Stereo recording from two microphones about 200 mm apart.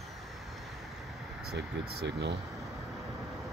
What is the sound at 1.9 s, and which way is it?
Speech, 55° right (ahead or behind).